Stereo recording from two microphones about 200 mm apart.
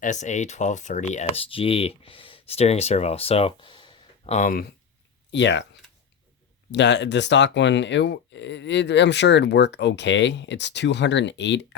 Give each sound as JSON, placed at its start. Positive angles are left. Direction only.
{"t": 0.0, "sound": "speech", "side_deg": 35}
{"t": 4.4, "sound": "speech", "side_deg": 45}
{"t": 5.3, "sound": "speech", "side_deg": 60}
{"t": 6.7, "sound": "speech", "side_deg": 60}